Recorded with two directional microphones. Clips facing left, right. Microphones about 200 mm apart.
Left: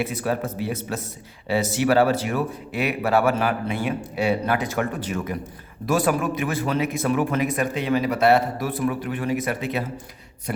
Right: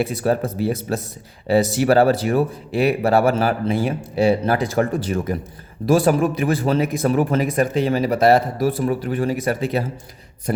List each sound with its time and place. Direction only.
0.0 s speech: 35° right (ahead or behind)